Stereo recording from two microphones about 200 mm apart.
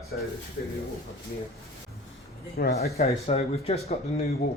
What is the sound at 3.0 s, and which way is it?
Speech, 30° left (ahead or behind).